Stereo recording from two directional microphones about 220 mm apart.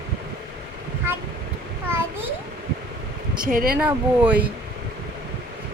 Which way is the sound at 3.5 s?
40° right (ahead or behind).